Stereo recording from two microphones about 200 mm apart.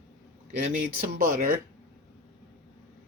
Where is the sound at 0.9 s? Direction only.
45° right (ahead or behind).